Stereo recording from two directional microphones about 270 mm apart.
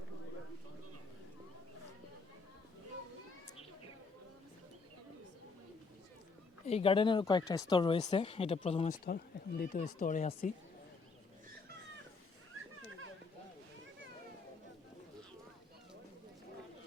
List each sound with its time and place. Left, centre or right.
6.7 s speech: left
9.0 s speech: left